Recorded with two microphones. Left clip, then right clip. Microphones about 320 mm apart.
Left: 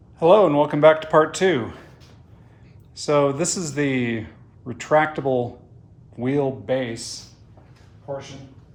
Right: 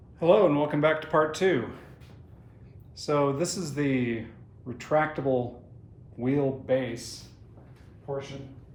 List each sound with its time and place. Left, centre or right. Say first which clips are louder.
0.2 s speech: left 7 dB; centre
2.9 s speech: left 7 dB; left